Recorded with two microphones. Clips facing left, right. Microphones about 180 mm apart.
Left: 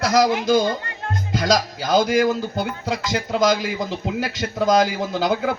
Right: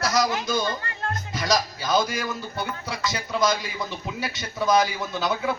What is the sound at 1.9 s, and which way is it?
Speech, 55° left (ahead or behind).